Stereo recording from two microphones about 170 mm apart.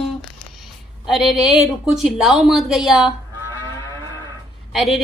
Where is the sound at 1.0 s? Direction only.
5° right (ahead or behind).